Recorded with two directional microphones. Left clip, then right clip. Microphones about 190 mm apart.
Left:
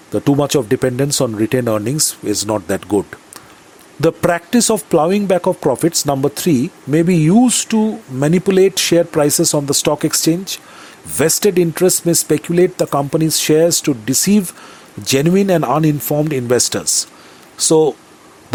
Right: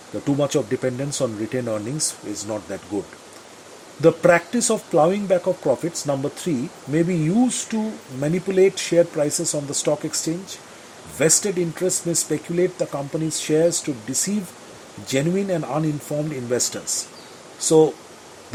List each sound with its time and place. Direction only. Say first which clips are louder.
0.3 s speech: left 6 dB; 35° left (ahead or behind)
4.0 s speech: even; 35° left (ahead or behind)